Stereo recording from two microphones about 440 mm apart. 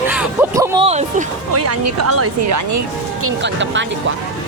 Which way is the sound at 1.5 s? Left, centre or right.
Right.